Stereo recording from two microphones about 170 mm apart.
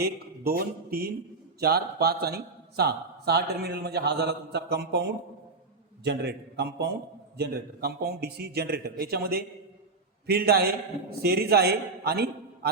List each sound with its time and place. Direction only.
0.0 s a man's voice: 65° right (ahead or behind)